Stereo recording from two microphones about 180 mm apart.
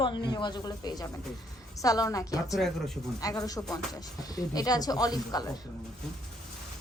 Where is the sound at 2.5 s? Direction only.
Centre (ahead or behind).